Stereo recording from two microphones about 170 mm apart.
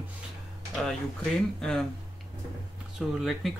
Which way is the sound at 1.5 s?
5° left (ahead or behind).